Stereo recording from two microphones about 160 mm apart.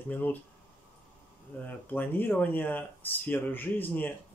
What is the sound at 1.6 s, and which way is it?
Speech, 10° left (ahead or behind).